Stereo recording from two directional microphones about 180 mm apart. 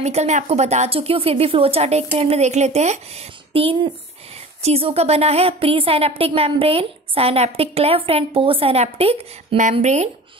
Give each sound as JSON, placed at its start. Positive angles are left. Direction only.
{"t": 0.0, "sound": "a woman's voice", "side_deg": -40}